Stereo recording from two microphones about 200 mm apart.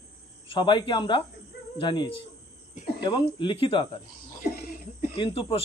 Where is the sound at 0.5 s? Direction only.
25° left (ahead or behind).